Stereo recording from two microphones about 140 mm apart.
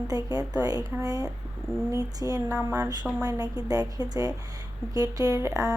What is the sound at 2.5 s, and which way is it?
Speech, 15° right (ahead or behind).